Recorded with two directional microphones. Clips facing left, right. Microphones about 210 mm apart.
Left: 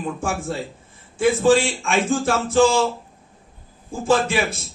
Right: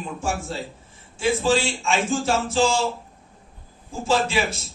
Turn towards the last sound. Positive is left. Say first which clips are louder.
# left 3 dB
turn(degrees=55)  # may be behind; listen again after turning